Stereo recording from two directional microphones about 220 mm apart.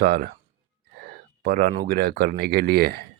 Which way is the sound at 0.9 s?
45° right (ahead or behind).